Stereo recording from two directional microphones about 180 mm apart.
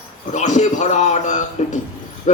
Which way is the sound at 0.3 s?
40° left (ahead or behind).